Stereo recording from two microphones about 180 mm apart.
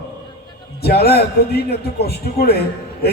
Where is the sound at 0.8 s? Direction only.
60° left (ahead or behind).